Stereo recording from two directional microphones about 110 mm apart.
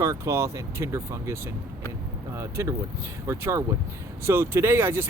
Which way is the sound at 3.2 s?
25° right (ahead or behind).